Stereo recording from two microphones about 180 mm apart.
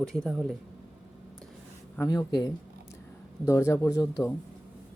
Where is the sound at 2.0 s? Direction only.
20° left (ahead or behind).